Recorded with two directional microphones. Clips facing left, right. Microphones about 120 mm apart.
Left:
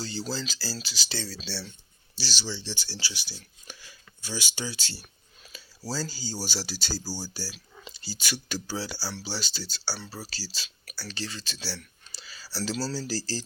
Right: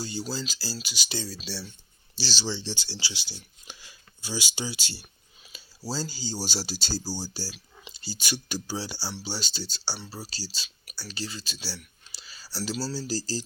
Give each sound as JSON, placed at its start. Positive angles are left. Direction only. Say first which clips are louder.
{"t": 0.0, "sound": "speech", "louder": "even", "side_deg": -15}
{"t": 2.2, "sound": "speech", "louder": "right 3 dB", "side_deg": -30}
{"t": 6.1, "sound": "speech", "louder": "right 1 dB", "side_deg": -25}